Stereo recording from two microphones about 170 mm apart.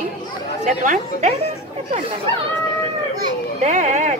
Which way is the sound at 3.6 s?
40° right (ahead or behind).